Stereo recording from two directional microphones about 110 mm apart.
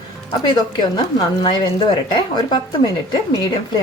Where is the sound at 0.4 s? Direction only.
40° left (ahead or behind).